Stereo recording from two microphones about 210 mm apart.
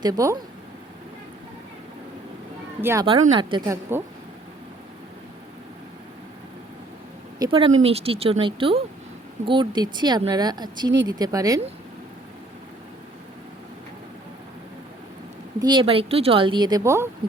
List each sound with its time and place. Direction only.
0.0 s speech: 15° right (ahead or behind)
2.8 s speech: 15° right (ahead or behind)
7.3 s speech: 20° right (ahead or behind)
15.6 s speech: 25° right (ahead or behind)